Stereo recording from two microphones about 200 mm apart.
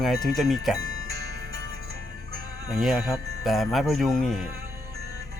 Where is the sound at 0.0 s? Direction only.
Centre (ahead or behind).